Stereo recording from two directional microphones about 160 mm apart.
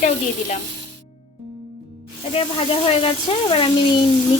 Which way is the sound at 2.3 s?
35° left (ahead or behind).